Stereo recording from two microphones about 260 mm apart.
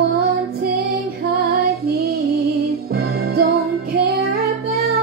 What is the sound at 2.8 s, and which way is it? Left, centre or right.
Music, right.